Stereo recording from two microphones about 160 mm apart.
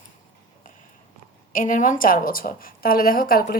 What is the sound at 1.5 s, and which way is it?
A woman's voice, 55° left (ahead or behind).